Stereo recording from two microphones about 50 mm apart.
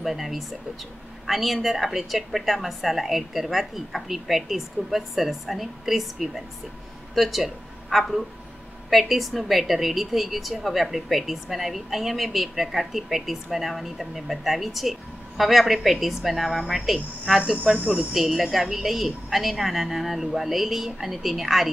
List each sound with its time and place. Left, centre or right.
0.0 s a woman's voice: centre